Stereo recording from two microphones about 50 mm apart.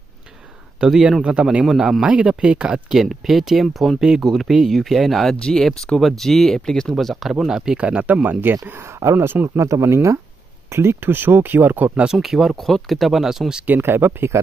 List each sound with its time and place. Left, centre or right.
1.2 s a man's voice: right
2.0 s speech: centre
2.9 s speech: centre
5.3 s speech: centre
7.2 s a man's voice: centre
7.8 s speech: right
8.1 s speech: right
9.6 s speech: right
12.1 s speech: centre
13.7 s speech: right